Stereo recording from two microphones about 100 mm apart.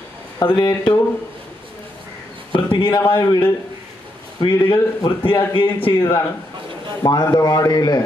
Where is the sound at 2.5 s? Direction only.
55° left (ahead or behind).